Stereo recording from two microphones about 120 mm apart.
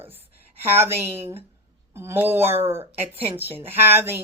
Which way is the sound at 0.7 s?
20° right (ahead or behind).